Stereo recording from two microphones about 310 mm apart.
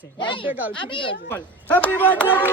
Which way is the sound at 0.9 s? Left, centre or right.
Centre.